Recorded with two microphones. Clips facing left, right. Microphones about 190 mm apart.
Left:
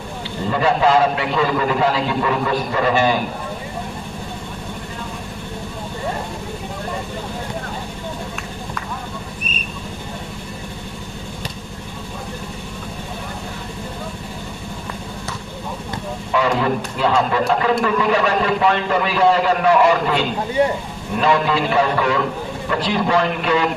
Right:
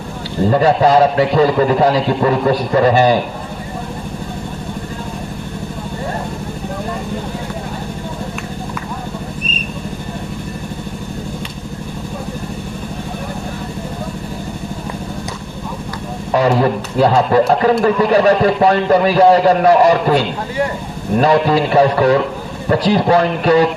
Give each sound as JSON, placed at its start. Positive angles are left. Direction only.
{"t": 0.4, "sound": "a man's voice", "side_deg": -40}
{"t": 16.3, "sound": "a man's voice", "side_deg": -40}